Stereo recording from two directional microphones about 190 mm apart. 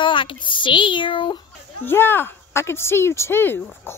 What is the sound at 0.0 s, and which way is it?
Speech, 25° left (ahead or behind).